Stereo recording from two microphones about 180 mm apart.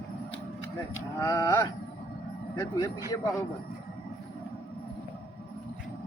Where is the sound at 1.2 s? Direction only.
20° left (ahead or behind).